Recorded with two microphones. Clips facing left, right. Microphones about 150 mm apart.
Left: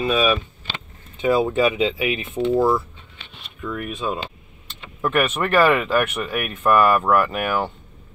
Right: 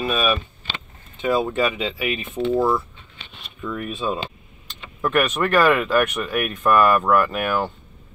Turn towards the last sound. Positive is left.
turn(degrees=10)  # may be behind; listen again after turning